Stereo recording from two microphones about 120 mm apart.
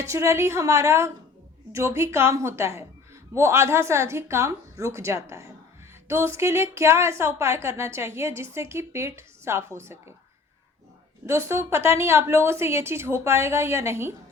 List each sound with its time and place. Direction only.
0.0 s speech: 25° right (ahead or behind)
11.3 s speech: 25° right (ahead or behind)